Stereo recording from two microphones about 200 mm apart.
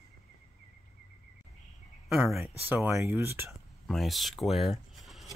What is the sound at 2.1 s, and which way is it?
Speech, centre (ahead or behind).